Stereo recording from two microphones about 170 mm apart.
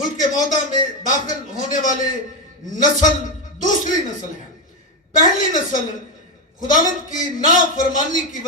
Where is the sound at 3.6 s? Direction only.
50° left (ahead or behind).